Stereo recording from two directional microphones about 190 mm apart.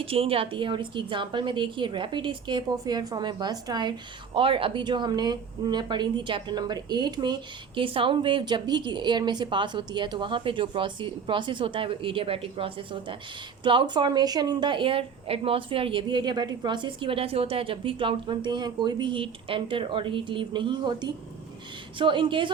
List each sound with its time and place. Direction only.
0.0 s a woman's voice: 30° right (ahead or behind)